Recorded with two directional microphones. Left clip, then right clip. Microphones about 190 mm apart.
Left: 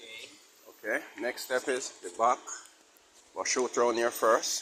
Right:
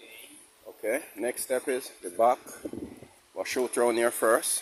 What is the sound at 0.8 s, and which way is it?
Speech, 60° right (ahead or behind).